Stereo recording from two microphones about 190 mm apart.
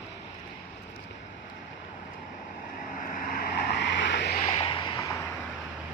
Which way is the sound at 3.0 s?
45° left (ahead or behind).